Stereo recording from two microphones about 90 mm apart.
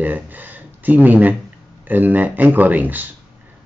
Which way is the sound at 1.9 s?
20° right (ahead or behind).